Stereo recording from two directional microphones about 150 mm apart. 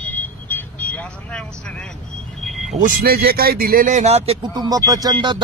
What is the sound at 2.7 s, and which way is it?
Speech, 60° right (ahead or behind).